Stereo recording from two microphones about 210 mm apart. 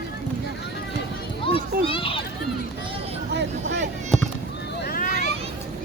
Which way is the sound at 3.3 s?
55° right (ahead or behind).